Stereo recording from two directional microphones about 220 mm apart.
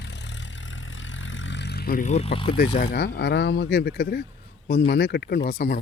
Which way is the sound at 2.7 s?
25° left (ahead or behind).